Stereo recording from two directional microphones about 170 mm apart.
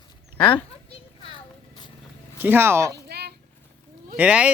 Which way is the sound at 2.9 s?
75° right (ahead or behind).